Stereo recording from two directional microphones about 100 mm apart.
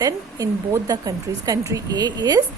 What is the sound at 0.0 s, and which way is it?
A woman's voice, 35° right (ahead or behind).